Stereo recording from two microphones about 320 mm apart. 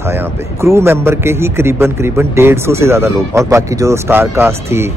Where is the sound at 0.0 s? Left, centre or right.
Centre.